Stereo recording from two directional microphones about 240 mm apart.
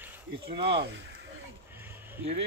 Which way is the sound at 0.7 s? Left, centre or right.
Right.